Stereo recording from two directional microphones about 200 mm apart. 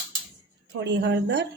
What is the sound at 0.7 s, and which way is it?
Speech, 60° right (ahead or behind).